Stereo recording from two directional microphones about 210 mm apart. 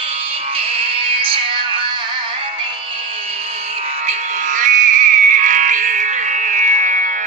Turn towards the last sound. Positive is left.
turn(degrees=-35)  # may be behind; listen again after turning